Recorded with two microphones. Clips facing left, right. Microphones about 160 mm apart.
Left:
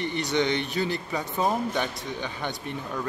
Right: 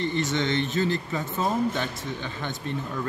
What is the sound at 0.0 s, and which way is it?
A man's voice, 15° left (ahead or behind).